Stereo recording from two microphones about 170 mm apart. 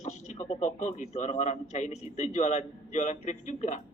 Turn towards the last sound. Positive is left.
turn(degrees=45)  # may be behind; listen again after turning